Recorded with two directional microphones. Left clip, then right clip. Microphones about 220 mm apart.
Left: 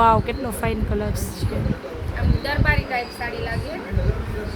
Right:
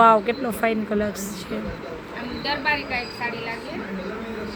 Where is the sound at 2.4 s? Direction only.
30° left (ahead or behind).